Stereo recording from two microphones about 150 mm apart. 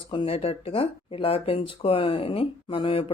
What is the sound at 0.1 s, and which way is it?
Speech, 35° left (ahead or behind).